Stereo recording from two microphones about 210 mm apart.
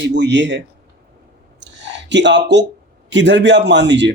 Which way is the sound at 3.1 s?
60° right (ahead or behind).